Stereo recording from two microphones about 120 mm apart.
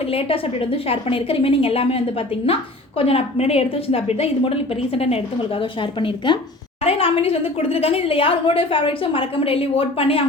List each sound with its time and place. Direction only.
0.1 s a woman's voice: 50° left (ahead or behind)
3.0 s a woman's voice: 55° left (ahead or behind)